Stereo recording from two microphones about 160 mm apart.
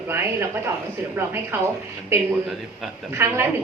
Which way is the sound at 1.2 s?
15° right (ahead or behind).